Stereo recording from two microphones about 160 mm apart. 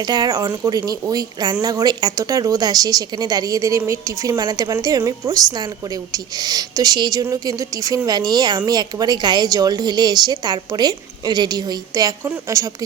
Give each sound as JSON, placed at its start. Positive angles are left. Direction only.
{"t": 0.1, "sound": "a woman's voice", "side_deg": -25}